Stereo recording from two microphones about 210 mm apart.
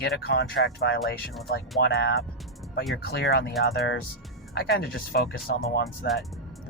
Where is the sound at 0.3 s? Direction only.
50° left (ahead or behind).